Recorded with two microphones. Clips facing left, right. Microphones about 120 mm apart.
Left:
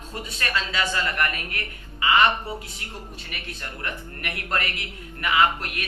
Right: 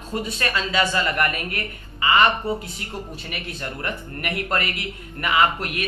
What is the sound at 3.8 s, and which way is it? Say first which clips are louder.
A man's voice: right 4 dB; 5° right (ahead or behind).